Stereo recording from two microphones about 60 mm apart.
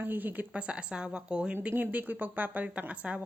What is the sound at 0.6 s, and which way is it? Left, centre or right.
Speech, centre.